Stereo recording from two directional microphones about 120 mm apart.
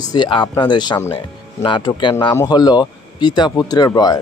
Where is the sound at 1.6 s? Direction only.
40° left (ahead or behind).